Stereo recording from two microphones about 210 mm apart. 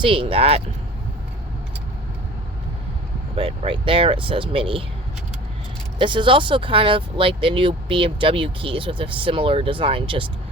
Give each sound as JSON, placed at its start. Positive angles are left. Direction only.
{"t": 0.0, "sound": "speech", "side_deg": -25}
{"t": 3.3, "sound": "speech", "side_deg": -25}
{"t": 6.0, "sound": "speech", "side_deg": -25}